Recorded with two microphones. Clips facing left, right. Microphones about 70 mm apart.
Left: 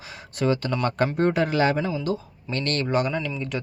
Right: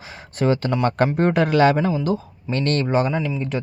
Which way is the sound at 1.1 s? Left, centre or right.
Right.